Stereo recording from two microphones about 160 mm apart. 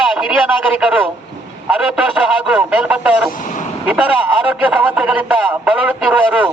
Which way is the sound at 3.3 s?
50° left (ahead or behind).